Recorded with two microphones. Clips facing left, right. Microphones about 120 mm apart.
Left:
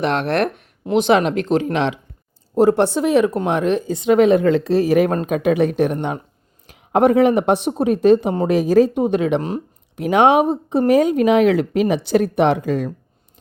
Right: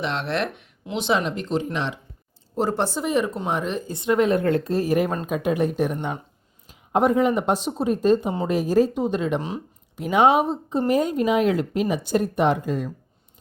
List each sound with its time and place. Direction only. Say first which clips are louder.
0.0 s speech: left 7 dB; 50° left (ahead or behind)
1.1 s speech: left 5 dB; 65° left (ahead or behind); by 2.0 s 90° left
2.6 s speech: left 9 dB; 60° left (ahead or behind); by 5.1 s 90° left
5.1 s speech: left 6 dB; 70° left (ahead or behind); by 12.9 s 90° left